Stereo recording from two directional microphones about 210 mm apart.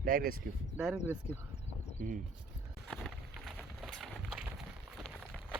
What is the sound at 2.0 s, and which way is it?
Speech, 40° right (ahead or behind).